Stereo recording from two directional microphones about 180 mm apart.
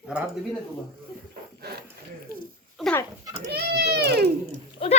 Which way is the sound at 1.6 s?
60° right (ahead or behind).